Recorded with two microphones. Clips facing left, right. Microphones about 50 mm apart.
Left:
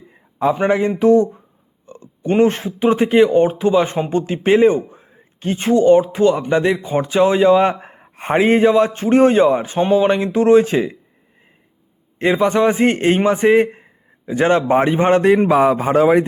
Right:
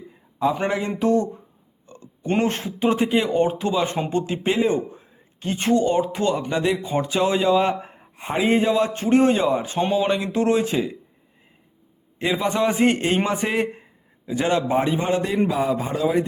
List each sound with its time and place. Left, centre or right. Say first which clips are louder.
0.7 s speech: left 8 dB; left
1.9 s a sound: left 6 dB; left
2.5 s speech: left 5 dB; left
9.7 s speech: left 6 dB; left
12.2 s a man's voice: left 7 dB; left
15.5 s a man's voice: left 9 dB; left